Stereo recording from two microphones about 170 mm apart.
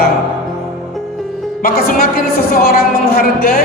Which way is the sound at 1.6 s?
60° left (ahead or behind).